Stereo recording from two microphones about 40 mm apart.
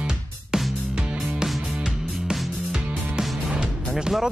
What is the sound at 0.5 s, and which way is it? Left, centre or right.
Music, centre.